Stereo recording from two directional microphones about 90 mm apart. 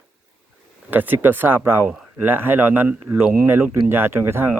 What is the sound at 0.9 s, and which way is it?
Speech, 20° right (ahead or behind).